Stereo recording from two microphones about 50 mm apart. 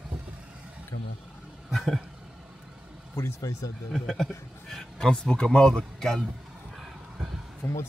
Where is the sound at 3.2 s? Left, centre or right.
Left.